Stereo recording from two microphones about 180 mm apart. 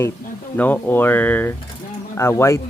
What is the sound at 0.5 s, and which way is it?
Speech, 10° left (ahead or behind).